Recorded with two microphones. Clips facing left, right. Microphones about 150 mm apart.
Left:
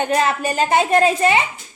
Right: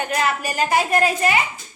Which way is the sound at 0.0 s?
30° left (ahead or behind).